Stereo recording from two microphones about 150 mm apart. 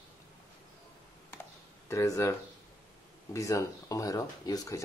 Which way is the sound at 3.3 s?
20° left (ahead or behind).